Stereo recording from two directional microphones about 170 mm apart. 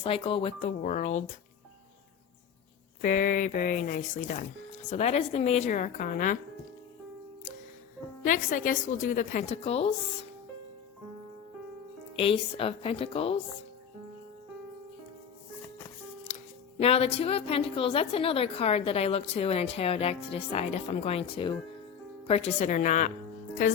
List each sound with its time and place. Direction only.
0.0 s speech: 30° left (ahead or behind)
0.8 s a woman's voice: 45° left (ahead or behind)
3.0 s a woman's voice: 50° left (ahead or behind)
8.2 s a woman's voice: 50° left (ahead or behind)
12.1 s speech: 35° left (ahead or behind)
16.3 s speech: 40° left (ahead or behind)
22.6 s a woman's voice: 45° left (ahead or behind)